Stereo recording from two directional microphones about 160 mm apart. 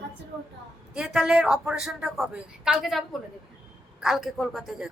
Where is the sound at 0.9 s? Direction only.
5° right (ahead or behind).